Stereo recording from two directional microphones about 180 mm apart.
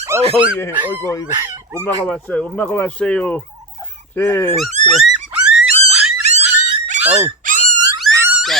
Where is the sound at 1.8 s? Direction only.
5° left (ahead or behind).